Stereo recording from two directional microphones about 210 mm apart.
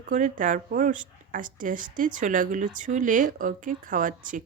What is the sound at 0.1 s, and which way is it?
Speech, 40° right (ahead or behind).